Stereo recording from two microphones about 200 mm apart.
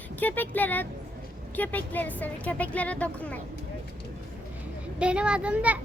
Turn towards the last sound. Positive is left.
turn(degrees=-5)  # may be behind; listen again after turning